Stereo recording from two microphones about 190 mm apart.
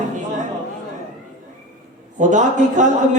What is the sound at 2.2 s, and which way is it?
Speech, 40° right (ahead or behind).